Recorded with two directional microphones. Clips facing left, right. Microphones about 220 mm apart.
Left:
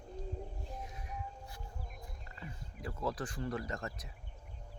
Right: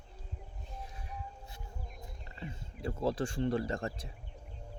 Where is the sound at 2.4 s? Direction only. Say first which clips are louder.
Right 5 dB; 25° right (ahead or behind).